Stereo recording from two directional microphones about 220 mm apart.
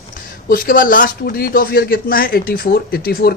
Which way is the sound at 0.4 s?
40° left (ahead or behind).